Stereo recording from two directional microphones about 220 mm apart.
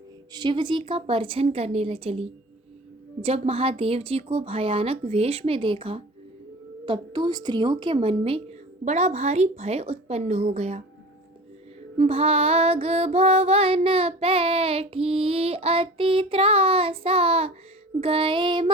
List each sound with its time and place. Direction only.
0.3 s music: 20° right (ahead or behind)
11.9 s music: 25° right (ahead or behind)